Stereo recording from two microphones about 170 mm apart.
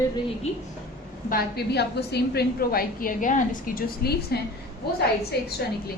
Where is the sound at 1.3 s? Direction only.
65° left (ahead or behind).